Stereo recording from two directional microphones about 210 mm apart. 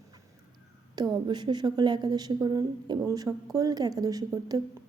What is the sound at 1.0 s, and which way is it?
A woman's voice, 20° right (ahead or behind).